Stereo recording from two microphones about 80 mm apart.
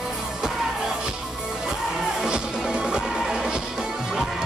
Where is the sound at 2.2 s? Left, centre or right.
Centre.